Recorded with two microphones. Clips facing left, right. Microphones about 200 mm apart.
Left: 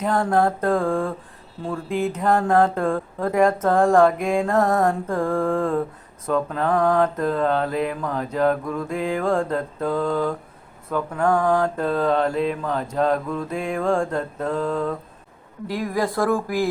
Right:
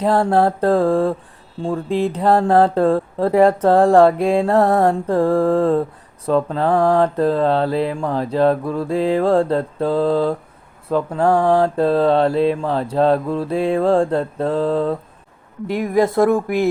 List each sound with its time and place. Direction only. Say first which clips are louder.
0.0 s speech: right 4 dB; 35° right (ahead or behind)